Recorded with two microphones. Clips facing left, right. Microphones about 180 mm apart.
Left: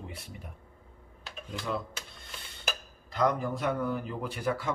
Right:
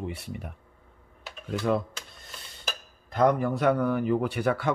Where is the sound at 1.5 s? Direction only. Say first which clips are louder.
Right 8 dB; 60° right (ahead or behind).